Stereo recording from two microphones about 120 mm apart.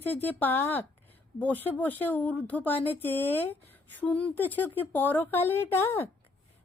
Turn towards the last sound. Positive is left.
turn(degrees=20)  # may be behind; listen again after turning